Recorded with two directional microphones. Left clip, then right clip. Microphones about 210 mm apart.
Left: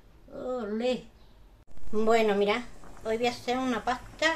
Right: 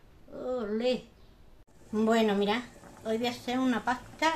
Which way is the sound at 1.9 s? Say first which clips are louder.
Left 3 dB; 20° left (ahead or behind).